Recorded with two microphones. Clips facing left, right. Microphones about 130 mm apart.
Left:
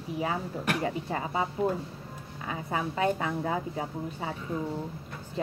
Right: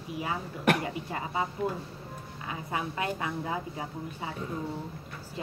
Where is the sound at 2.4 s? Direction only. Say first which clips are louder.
Left 2 dB; 30° left (ahead or behind).